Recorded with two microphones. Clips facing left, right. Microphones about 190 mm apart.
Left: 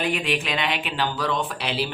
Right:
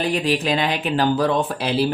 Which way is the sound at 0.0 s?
35° right (ahead or behind).